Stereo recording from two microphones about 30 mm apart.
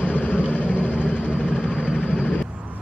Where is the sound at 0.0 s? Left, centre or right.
Left.